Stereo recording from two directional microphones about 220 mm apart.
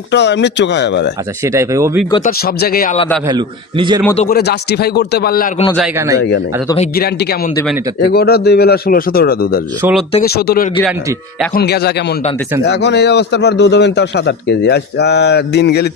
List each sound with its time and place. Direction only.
0.1 s a man's voice: 50° left (ahead or behind)
1.4 s speech: 15° right (ahead or behind)
2.2 s speech: 45° left (ahead or behind)
3.3 s a man's voice: 20° right (ahead or behind)
4.2 s a man's voice: 45° left (ahead or behind)
7.0 s a man's voice: 45° left (ahead or behind)
9.8 s speech: 10° right (ahead or behind)
10.2 s a man's voice: 45° left (ahead or behind)